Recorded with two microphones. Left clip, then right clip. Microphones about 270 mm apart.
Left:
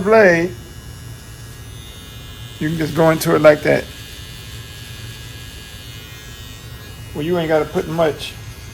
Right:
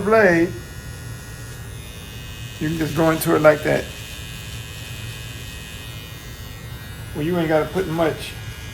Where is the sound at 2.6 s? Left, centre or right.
Left.